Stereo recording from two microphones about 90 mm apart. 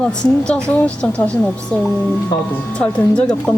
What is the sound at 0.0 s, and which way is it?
A woman's voice, 10° left (ahead or behind).